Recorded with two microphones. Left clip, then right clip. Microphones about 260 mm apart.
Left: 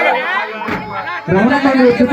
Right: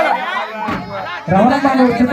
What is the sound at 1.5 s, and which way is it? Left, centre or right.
Speech, centre.